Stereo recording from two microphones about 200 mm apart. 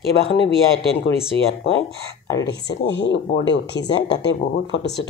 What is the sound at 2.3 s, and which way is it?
Speech, 60° left (ahead or behind).